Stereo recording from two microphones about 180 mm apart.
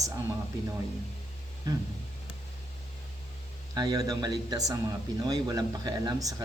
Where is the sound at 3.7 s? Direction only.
20° right (ahead or behind).